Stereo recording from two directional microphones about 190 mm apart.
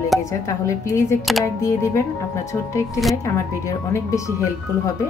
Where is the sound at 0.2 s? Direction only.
15° left (ahead or behind).